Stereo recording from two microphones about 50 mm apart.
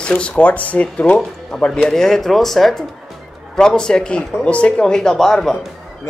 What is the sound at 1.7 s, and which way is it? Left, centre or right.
Speech, centre.